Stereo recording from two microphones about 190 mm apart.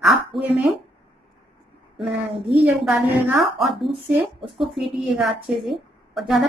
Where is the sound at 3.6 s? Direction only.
Centre (ahead or behind).